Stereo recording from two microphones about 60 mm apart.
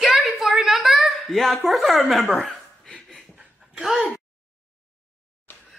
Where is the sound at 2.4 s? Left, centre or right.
Centre.